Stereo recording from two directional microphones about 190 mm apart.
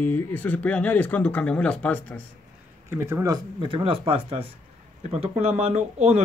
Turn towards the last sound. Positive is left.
turn(degrees=-35)  # may be behind; listen again after turning